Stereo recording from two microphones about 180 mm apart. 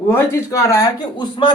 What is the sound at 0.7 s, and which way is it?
Speech, 20° left (ahead or behind).